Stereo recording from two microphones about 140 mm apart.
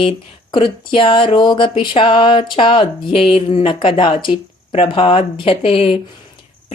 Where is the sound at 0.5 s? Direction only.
35° left (ahead or behind).